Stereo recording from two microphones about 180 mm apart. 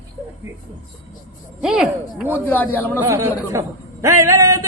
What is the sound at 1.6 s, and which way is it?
Speech, centre (ahead or behind).